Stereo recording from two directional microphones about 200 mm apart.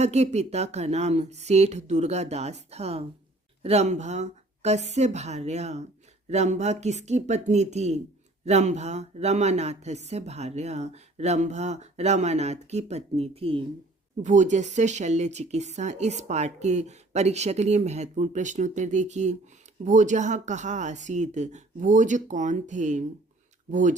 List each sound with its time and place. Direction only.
0.0 s speech: 35° right (ahead or behind)